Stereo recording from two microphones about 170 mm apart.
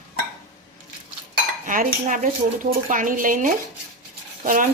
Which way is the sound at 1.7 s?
50° right (ahead or behind).